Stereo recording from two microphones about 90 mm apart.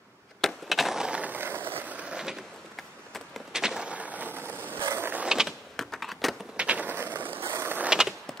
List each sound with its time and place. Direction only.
0.4 s skateboard: centre (ahead or behind)
2.7 s a sound: centre (ahead or behind); by 4.6 s 25° right (ahead or behind)
4.8 s mechanisms: 25° right (ahead or behind)
5.2 s power windows: 5° right (ahead or behind)
5.8 s a sound: centre (ahead or behind)
6.5 s mechanisms: 15° right (ahead or behind)
7.8 s power windows: 10° right (ahead or behind)